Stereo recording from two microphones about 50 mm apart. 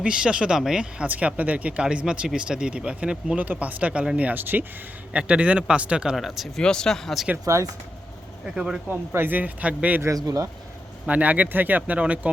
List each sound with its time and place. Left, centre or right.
0.0 s speech: centre
1.0 s speech: right
3.3 s speech: right
5.1 s speech: right
6.1 s speech: centre
6.6 s speech: centre
7.5 s speech: right
8.4 s speech: centre
9.1 s speech: right
9.4 s speech: right
10.0 s speech: right
11.0 s speech: right